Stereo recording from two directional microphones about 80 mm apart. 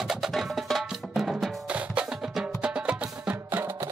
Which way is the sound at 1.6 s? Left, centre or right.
Centre.